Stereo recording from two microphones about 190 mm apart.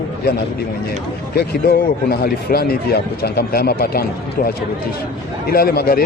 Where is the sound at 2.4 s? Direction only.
55° left (ahead or behind).